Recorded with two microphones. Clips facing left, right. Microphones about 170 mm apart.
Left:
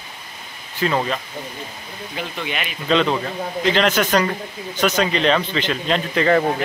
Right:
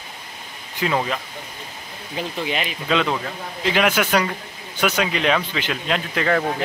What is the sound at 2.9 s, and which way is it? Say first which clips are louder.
A man's voice: left 3 dB; 5° right (ahead or behind).